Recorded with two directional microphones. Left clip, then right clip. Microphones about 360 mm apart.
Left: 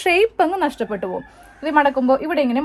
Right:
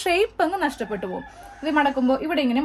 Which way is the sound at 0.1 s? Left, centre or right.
Centre.